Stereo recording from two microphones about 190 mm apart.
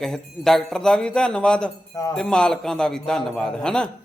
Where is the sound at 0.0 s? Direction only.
Centre (ahead or behind).